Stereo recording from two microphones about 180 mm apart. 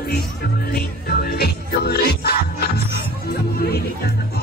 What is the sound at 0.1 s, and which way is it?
Music, 60° left (ahead or behind).